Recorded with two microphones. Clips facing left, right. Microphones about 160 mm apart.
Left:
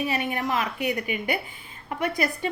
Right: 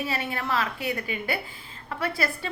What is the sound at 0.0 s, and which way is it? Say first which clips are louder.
A woman's voice: left 3 dB; 15° left (ahead or behind).